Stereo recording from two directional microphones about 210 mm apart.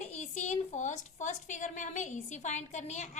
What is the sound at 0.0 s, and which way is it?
A woman's voice, 30° left (ahead or behind).